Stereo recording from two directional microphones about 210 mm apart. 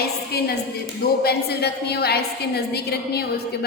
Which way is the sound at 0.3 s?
50° left (ahead or behind).